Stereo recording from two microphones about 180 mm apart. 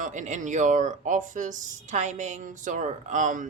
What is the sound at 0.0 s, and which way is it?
Speech, 45° right (ahead or behind).